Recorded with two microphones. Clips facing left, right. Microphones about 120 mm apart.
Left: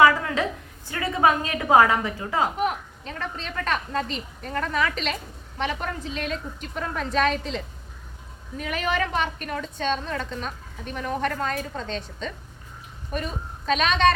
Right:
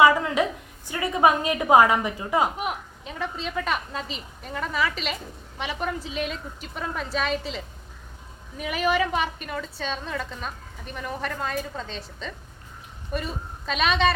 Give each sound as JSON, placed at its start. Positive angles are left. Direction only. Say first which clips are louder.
{"t": 0.0, "sound": "a woman's voice", "louder": "even", "side_deg": -20}